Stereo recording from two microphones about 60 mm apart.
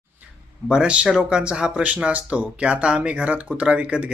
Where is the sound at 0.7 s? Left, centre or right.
Centre.